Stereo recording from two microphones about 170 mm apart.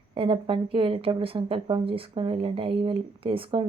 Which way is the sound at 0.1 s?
30° right (ahead or behind).